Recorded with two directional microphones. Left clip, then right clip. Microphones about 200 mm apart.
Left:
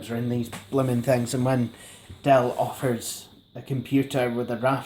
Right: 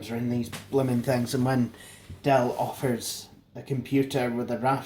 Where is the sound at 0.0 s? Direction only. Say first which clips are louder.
Left 2 dB; 35° left (ahead or behind).